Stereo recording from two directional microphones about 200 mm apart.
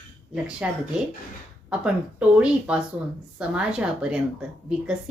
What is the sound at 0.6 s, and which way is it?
A woman's voice, 5° right (ahead or behind).